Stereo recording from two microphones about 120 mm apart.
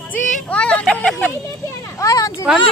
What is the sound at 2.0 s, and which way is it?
Speech, 30° left (ahead or behind).